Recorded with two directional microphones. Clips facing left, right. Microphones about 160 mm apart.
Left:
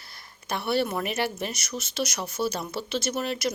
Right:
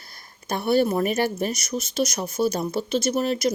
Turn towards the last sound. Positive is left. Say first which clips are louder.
# right 6 dB
turn(degrees=-40)  # may be behind; listen again after turning